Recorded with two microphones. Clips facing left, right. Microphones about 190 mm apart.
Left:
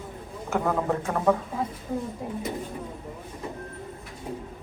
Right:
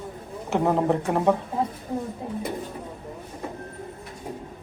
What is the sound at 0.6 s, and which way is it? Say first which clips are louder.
Speech: right 4 dB; 20° right (ahead or behind).